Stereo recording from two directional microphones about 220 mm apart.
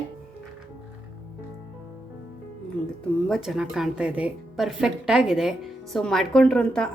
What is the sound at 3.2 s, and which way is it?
A woman's voice, centre (ahead or behind).